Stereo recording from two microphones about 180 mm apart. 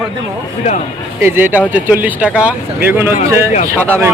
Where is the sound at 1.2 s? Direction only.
10° right (ahead or behind).